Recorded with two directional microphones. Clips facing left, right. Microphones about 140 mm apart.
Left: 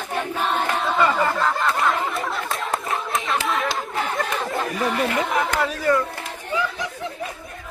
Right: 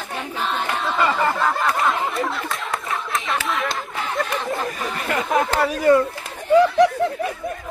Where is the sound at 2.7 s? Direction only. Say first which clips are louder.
Left 1 dB; 25° left (ahead or behind).